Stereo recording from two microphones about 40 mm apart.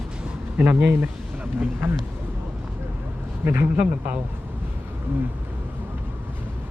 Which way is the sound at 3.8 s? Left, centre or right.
Right.